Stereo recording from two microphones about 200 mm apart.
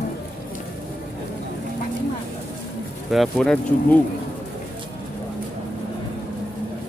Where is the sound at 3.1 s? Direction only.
Centre (ahead or behind).